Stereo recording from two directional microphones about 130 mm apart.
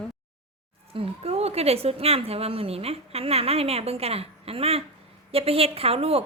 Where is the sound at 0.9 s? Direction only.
50° right (ahead or behind).